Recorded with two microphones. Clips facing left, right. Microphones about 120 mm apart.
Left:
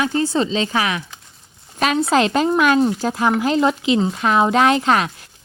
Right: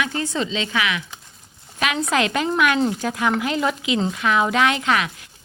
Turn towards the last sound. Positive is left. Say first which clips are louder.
# left 4 dB
turn(degrees=35)  # may be behind; listen again after turning